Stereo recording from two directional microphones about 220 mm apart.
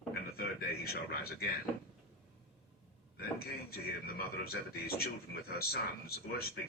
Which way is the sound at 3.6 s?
45° left (ahead or behind).